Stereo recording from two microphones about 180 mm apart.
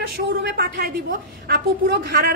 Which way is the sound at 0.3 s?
55° right (ahead or behind).